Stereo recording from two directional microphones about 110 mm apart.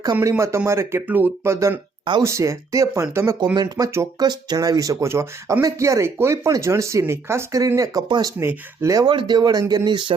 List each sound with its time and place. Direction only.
0.2 s speech: 25° right (ahead or behind)
1.5 s speech: 30° right (ahead or behind)
3.5 s speech: 40° right (ahead or behind)
7.8 s speech: 40° right (ahead or behind)
8.4 s speech: 25° right (ahead or behind)
9.0 s speech: 45° right (ahead or behind)